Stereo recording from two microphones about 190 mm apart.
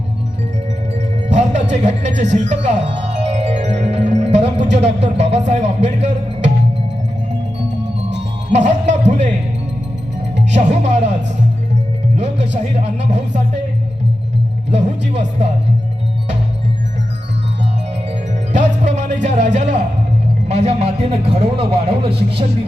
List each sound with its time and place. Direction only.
0.9 s music: 35° right (ahead or behind)
1.7 s a man's voice: 35° right (ahead or behind)
8.5 s a man's voice: 35° right (ahead or behind)
10.3 s speech: 35° right (ahead or behind)
12.1 s music: 35° right (ahead or behind)
12.5 s speech: 40° right (ahead or behind)
14.7 s a man's voice: 35° right (ahead or behind)
18.1 s music: 35° right (ahead or behind)
19.5 s a man's voice: 35° right (ahead or behind)